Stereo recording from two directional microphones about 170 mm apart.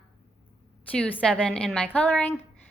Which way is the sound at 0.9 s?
5° left (ahead or behind).